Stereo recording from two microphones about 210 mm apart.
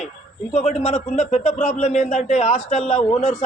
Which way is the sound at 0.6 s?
30° left (ahead or behind).